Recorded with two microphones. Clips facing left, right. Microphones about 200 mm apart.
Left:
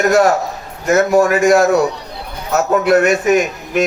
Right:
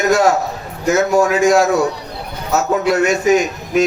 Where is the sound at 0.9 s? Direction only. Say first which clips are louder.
Left 3 dB; 55° left (ahead or behind).